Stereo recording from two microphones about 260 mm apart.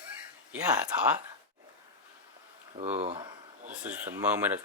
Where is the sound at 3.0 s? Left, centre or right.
Centre.